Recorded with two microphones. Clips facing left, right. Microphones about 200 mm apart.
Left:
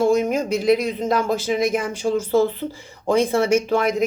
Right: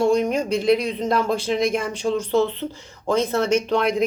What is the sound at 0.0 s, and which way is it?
Speech, 5° left (ahead or behind).